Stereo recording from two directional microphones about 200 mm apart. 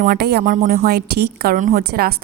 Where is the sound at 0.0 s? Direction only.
50° right (ahead or behind).